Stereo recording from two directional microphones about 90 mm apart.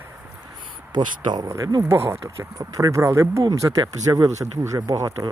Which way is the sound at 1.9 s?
30° right (ahead or behind).